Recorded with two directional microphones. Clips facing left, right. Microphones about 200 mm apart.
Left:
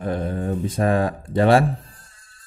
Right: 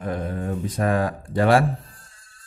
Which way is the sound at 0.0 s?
30° left (ahead or behind).